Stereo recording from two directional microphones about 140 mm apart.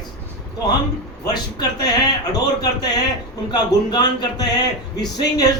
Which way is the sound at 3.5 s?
30° left (ahead or behind).